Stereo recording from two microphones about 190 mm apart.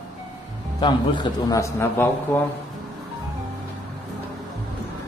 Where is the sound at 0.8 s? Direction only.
25° left (ahead or behind).